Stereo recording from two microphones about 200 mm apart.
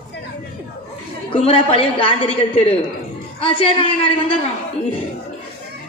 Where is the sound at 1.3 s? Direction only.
30° left (ahead or behind).